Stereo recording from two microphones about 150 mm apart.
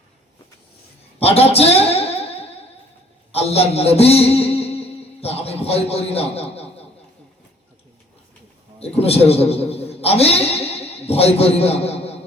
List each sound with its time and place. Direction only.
1.2 s a sound: 40° left (ahead or behind)
3.3 s a man's voice: 40° left (ahead or behind)
8.8 s a man's voice: 40° left (ahead or behind)